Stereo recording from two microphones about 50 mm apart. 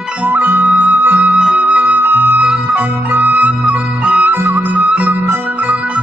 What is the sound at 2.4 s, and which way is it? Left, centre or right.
Music, right.